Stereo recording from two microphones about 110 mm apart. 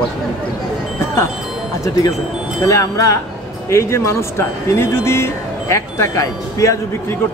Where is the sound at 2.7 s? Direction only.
30° left (ahead or behind).